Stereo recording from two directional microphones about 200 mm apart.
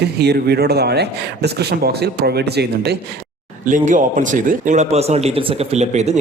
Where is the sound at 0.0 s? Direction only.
55° right (ahead or behind).